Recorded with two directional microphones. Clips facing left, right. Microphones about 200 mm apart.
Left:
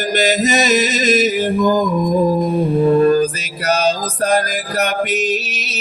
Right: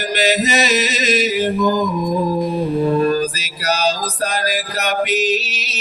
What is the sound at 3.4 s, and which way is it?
Music, 55° left (ahead or behind).